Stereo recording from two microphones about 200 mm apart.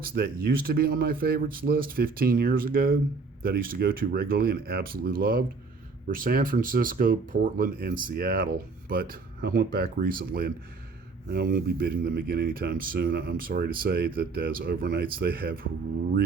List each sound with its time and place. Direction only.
0.0 s speech: 50° right (ahead or behind)